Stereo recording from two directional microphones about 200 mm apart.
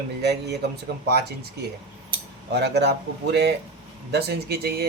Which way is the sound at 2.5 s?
55° right (ahead or behind).